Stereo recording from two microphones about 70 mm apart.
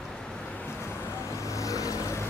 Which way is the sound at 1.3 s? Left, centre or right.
Left.